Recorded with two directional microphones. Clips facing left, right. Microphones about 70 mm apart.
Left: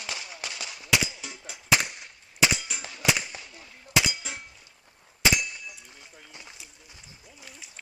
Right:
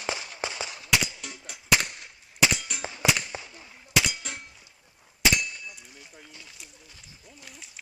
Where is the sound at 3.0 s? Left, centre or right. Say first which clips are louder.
Even; right.